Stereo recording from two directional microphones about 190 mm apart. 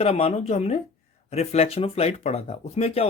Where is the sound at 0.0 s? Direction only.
30° left (ahead or behind).